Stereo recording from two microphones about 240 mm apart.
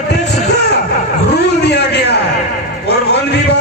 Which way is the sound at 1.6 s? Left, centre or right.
Left.